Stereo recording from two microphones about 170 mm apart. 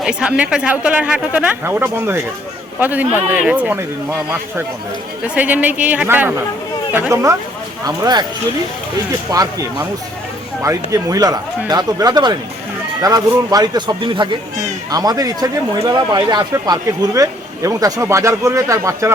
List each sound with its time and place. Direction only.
0.0 s speech: 5° right (ahead or behind)
5.3 s speech: 10° right (ahead or behind)
9.3 s speech: 20° right (ahead or behind)